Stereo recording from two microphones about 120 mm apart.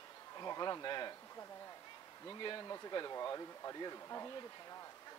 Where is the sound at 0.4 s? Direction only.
35° left (ahead or behind).